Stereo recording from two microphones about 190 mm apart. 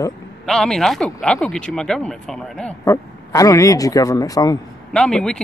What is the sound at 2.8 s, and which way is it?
Speech, 15° left (ahead or behind).